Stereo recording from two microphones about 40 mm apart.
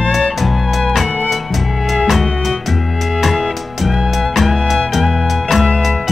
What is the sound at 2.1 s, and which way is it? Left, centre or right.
Music, centre.